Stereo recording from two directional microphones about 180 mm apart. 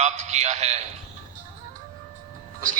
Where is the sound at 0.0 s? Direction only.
40° right (ahead or behind).